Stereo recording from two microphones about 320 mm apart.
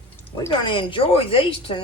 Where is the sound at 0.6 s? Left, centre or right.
Centre.